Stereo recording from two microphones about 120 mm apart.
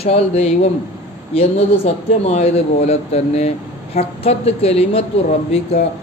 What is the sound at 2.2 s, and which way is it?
A woman's voice, 65° left (ahead or behind).